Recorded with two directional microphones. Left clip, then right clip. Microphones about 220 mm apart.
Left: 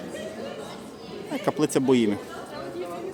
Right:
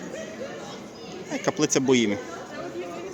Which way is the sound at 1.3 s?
10° left (ahead or behind).